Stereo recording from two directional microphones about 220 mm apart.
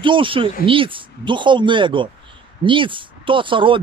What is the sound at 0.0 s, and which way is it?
Speech, 20° right (ahead or behind).